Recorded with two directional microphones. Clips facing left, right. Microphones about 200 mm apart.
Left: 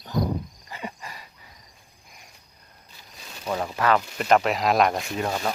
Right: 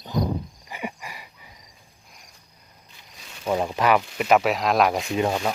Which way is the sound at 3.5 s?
20° right (ahead or behind).